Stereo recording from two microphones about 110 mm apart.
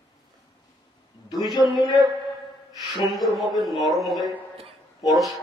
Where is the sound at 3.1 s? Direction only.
Centre (ahead or behind).